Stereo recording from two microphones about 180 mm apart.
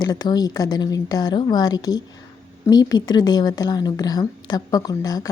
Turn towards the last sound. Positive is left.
turn(degrees=20)  # may be behind; listen again after turning